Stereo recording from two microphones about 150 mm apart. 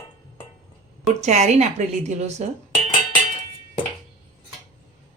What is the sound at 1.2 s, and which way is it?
Speech, 50° right (ahead or behind).